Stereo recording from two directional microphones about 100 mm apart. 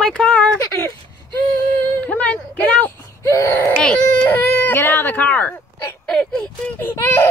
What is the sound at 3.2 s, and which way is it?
Speech, 30° left (ahead or behind).